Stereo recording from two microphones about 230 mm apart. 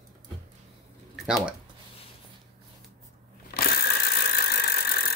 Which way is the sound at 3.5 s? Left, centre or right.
Left.